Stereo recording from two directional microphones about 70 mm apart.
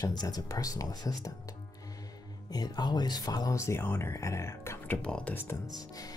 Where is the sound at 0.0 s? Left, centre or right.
Left.